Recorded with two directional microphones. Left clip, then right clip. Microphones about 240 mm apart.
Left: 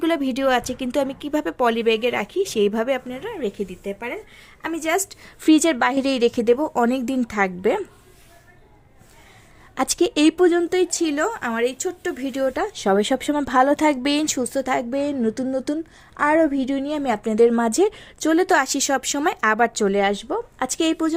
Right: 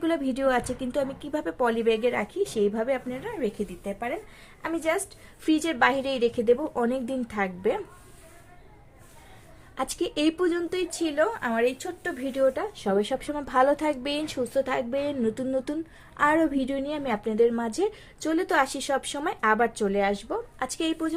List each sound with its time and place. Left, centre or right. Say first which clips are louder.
0.0 s speech: left 5 dB; left
9.7 s speech: left 8 dB; left